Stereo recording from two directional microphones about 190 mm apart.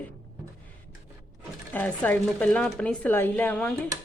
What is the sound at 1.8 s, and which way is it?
A woman's voice, 10° left (ahead or behind).